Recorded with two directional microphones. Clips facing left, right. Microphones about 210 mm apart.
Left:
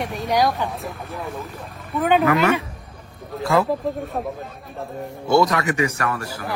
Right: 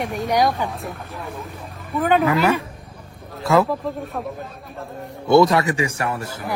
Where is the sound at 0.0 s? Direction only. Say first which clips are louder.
Right 1 dB; centre (ahead or behind).